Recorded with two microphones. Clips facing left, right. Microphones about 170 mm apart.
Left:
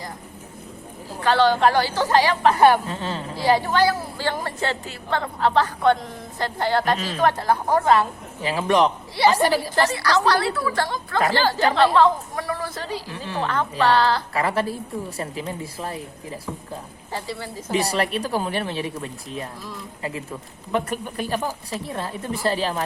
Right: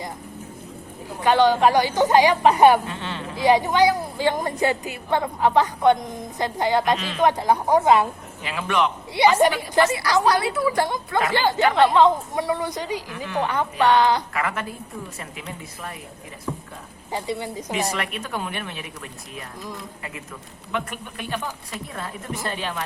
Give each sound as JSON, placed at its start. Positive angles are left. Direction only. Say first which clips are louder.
{"t": 1.2, "sound": "a woman's voice", "louder": "right 1 dB", "side_deg": -15}
{"t": 2.8, "sound": "speech", "louder": "left 2 dB", "side_deg": 40}
{"t": 3.4, "sound": "a woman's voice", "louder": "right 2 dB", "side_deg": -15}
{"t": 8.4, "sound": "speech", "louder": "left 4 dB", "side_deg": 35}
{"t": 9.2, "sound": "a woman's voice", "louder": "right 1 dB", "side_deg": -20}
{"t": 13.1, "sound": "speech", "louder": "even", "side_deg": 30}
{"t": 13.4, "sound": "a woman's voice", "louder": "even", "side_deg": -15}
{"t": 14.3, "sound": "speech", "louder": "left 4 dB", "side_deg": 35}
{"t": 17.1, "sound": "a woman's voice", "louder": "right 4 dB", "side_deg": -20}
{"t": 17.7, "sound": "speech", "louder": "left 5 dB", "side_deg": 35}